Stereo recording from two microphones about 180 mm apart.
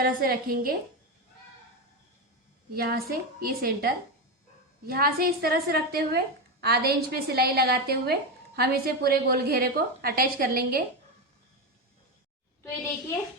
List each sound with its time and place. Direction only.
0.0 s a woman's voice: 50° right (ahead or behind)
2.7 s a woman's voice: 55° right (ahead or behind)